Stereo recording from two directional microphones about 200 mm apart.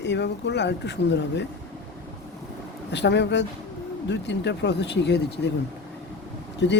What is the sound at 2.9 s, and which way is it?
Speech, 60° left (ahead or behind).